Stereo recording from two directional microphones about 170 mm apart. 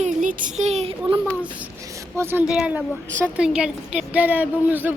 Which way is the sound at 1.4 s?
15° right (ahead or behind).